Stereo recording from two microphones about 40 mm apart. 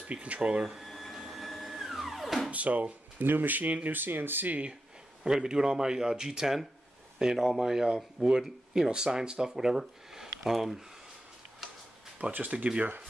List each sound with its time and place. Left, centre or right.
0.0 s speech: right
0.8 s a sound: centre
1.1 s music: centre
2.5 s speech: right
3.2 s speech: right
4.5 s speech: right
5.2 s speech: centre
12.4 s speech: right